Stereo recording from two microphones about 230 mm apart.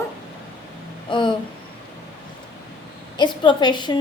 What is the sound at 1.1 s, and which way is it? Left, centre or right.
Speech, centre.